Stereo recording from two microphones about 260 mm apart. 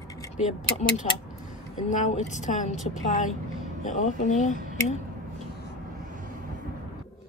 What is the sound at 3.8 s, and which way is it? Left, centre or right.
Speech, left.